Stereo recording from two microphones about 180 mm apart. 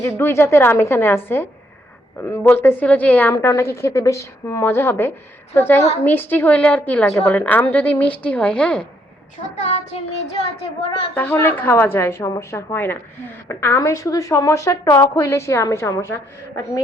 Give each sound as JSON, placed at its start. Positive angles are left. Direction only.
{"t": 0.0, "sound": "a woman's voice", "side_deg": 15}
{"t": 9.6, "sound": "a woman's voice", "side_deg": 40}
{"t": 11.1, "sound": "a woman's voice", "side_deg": 10}